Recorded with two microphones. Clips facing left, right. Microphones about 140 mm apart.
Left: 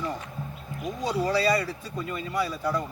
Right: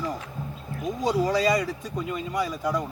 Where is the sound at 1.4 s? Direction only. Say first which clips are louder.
Right 1 dB; 15° right (ahead or behind).